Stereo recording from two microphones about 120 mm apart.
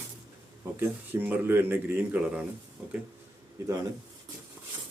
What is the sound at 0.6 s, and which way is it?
Speech, 15° right (ahead or behind).